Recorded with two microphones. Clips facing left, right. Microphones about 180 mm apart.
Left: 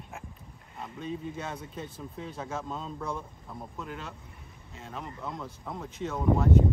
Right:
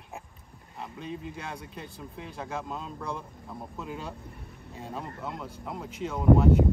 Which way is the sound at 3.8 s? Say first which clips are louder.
Right 3 dB; 15° right (ahead or behind).